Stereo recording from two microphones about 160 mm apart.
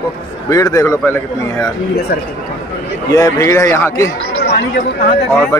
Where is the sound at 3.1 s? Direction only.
20° left (ahead or behind).